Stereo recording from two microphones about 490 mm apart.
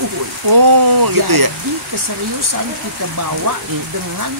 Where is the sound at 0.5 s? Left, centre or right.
Right.